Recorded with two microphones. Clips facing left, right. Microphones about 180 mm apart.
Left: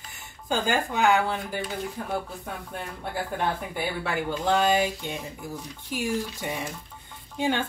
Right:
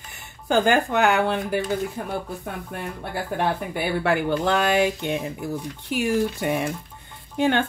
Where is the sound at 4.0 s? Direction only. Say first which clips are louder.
Right 7 dB; 65° right (ahead or behind).